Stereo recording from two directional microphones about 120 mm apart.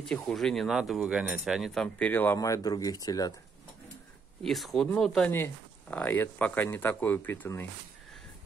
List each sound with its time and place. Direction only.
0.0 s speech: 5° left (ahead or behind)
2.3 s speech: 25° left (ahead or behind)
4.4 s speech: centre (ahead or behind)
5.3 s speech: 15° left (ahead or behind)